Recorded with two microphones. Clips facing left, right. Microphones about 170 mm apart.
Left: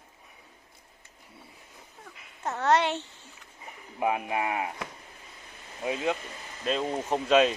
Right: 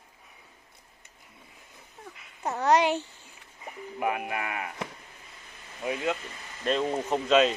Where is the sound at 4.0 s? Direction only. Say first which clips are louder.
Left 2 dB; 25° left (ahead or behind).